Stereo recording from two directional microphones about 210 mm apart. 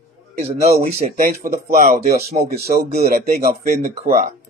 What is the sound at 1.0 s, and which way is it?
Speech, 35° right (ahead or behind).